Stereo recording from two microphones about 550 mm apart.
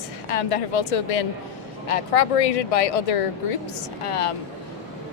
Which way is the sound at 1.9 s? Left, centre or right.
Left.